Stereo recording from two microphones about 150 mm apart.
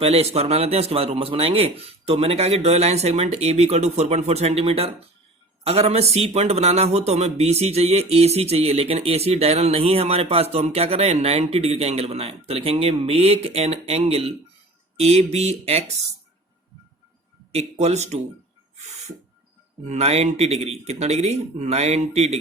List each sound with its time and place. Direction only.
0.0 s speech: 40° right (ahead or behind)
17.5 s speech: 45° right (ahead or behind)
19.8 s speech: 45° right (ahead or behind)